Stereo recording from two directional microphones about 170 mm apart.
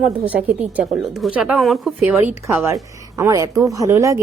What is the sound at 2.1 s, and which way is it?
A woman's voice, 10° right (ahead or behind).